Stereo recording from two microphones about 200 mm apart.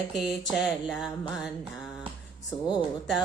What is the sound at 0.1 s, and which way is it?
Mantra, centre (ahead or behind).